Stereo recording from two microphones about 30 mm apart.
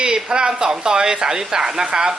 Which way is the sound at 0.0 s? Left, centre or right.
Right.